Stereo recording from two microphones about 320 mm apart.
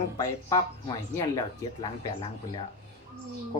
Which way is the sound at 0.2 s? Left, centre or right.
Centre.